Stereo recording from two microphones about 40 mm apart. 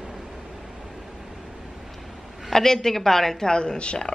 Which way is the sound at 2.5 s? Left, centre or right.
Centre.